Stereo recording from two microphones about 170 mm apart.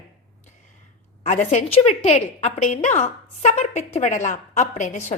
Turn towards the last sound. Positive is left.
turn(degrees=45)  # may be behind; listen again after turning